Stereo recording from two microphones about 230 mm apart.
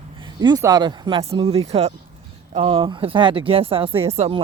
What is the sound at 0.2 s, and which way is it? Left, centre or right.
Speech, centre.